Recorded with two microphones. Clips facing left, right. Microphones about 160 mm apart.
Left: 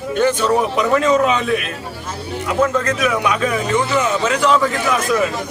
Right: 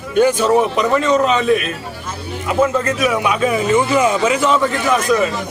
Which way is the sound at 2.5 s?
10° right (ahead or behind).